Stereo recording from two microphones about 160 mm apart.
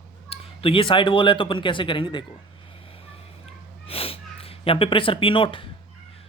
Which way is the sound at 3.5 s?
35° left (ahead or behind).